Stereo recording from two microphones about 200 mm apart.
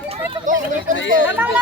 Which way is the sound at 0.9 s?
65° left (ahead or behind).